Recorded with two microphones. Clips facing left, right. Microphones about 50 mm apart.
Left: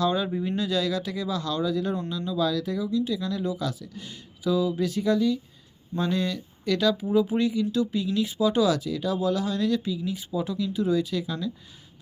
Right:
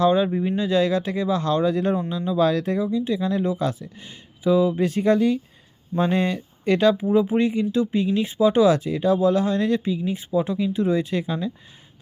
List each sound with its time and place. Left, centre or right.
0.0 s speech: right
0.4 s speech: centre
0.7 s speech: right
2.0 s speech: right
2.4 s speech: right